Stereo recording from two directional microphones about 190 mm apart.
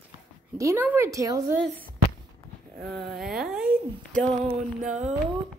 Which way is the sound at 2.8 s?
Centre (ahead or behind).